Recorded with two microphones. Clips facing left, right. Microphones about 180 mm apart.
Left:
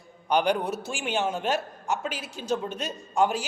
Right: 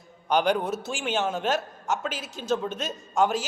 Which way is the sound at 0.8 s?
10° left (ahead or behind).